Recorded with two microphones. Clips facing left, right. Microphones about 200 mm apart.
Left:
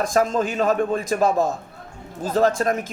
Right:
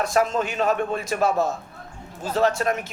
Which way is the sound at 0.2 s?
40° left (ahead or behind).